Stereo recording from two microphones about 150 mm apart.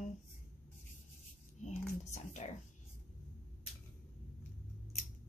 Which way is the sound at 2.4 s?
40° left (ahead or behind).